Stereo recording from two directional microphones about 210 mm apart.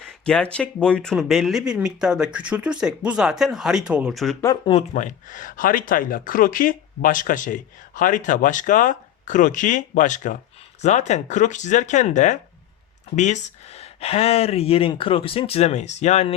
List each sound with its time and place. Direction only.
0.3 s speech: 5° left (ahead or behind)
4.4 s speech: 25° left (ahead or behind)
4.9 s speech: 35° left (ahead or behind)